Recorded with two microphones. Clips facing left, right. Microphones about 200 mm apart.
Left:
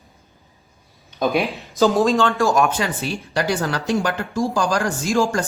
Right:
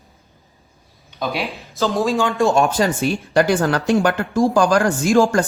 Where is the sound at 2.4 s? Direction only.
30° right (ahead or behind); by 5.4 s 55° right (ahead or behind).